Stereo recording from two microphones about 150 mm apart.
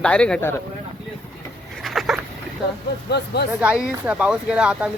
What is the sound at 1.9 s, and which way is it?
Boat, centre (ahead or behind).